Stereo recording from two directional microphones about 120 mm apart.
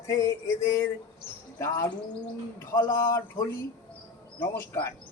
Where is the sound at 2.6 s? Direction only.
20° left (ahead or behind).